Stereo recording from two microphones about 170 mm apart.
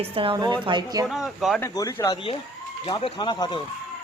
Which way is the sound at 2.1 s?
30° left (ahead or behind).